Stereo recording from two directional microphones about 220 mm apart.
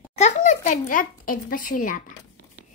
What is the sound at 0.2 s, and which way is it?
A child's voice, 35° left (ahead or behind).